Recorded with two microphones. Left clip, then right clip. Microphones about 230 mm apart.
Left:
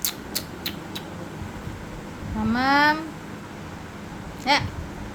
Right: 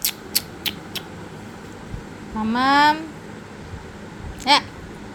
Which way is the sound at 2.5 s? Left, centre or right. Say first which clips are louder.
Right 3 dB; centre.